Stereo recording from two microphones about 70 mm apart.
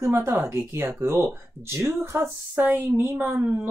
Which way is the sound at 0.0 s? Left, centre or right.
Right.